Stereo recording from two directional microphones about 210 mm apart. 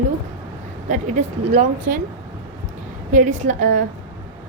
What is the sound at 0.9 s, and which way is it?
Speech, 35° right (ahead or behind).